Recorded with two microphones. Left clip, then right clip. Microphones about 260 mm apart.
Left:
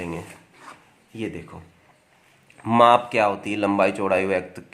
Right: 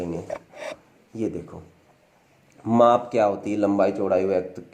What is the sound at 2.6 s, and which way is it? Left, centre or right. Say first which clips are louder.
Speech: left 2 dB; left.